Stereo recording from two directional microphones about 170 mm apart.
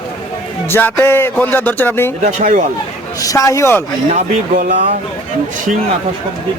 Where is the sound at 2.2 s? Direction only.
45° right (ahead or behind).